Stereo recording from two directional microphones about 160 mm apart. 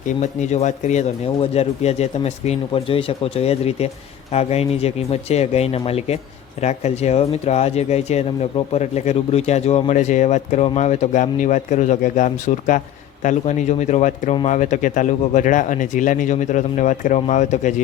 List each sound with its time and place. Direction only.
0.2 s speech: 45° left (ahead or behind)